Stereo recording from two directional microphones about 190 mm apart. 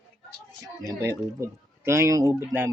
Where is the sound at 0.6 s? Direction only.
15° right (ahead or behind).